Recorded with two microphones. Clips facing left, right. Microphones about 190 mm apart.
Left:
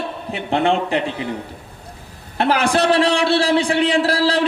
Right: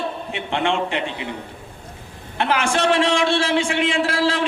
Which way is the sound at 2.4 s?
35° left (ahead or behind).